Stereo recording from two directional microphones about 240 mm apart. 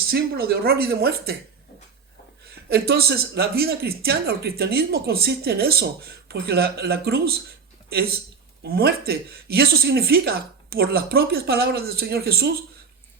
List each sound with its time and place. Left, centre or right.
0.1 s speech: right
2.5 s speech: right